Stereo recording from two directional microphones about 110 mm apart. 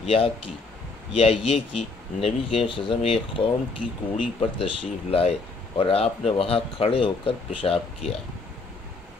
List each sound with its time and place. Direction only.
0.0 s speech: 60° left (ahead or behind)